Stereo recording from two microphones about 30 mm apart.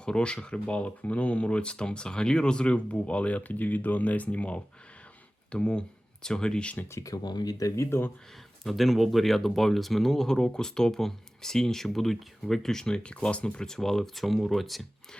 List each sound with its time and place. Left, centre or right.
0.0 s speech: left
0.6 s speech: left
5.5 s speech: left
6.2 s speech: left
6.8 s speech: left
8.6 s speech: centre
13.0 s speech: left
13.6 s speech: centre